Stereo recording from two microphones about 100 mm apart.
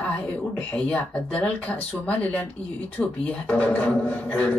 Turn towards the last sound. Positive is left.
turn(degrees=15)  # may be behind; listen again after turning